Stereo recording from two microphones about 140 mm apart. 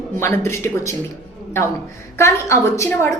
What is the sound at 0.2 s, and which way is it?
Speech, 20° left (ahead or behind).